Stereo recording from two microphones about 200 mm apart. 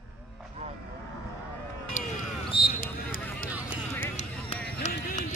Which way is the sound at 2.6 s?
45° left (ahead or behind).